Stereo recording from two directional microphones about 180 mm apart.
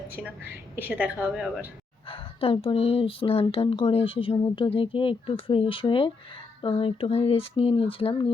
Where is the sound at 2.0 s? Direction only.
30° left (ahead or behind).